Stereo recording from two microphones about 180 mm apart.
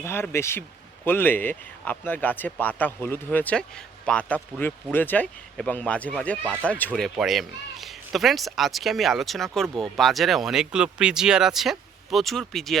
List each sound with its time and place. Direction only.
0.0 s speech: 15° left (ahead or behind)
6.4 s speech: 10° right (ahead or behind)
6.7 s speech: 10° left (ahead or behind)